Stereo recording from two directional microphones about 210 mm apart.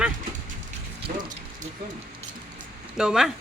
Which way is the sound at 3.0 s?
5° right (ahead or behind).